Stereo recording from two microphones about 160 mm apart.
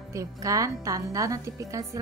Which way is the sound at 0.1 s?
20° right (ahead or behind).